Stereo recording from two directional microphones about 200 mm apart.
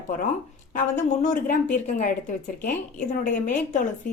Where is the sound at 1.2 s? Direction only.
40° left (ahead or behind).